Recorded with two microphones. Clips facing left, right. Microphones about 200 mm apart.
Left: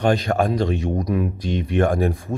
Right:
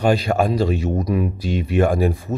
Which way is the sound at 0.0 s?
10° right (ahead or behind).